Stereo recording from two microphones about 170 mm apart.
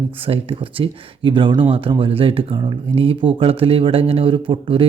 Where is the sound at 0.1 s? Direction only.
35° right (ahead or behind).